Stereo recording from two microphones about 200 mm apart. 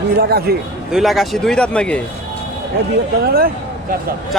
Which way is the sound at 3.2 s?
50° right (ahead or behind).